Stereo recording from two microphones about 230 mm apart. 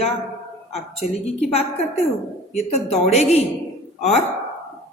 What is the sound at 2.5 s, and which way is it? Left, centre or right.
Speech, left.